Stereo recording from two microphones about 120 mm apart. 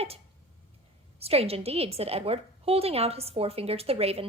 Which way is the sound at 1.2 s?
55° right (ahead or behind).